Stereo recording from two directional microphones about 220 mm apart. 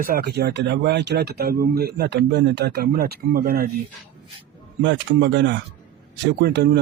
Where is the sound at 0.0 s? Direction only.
40° right (ahead or behind).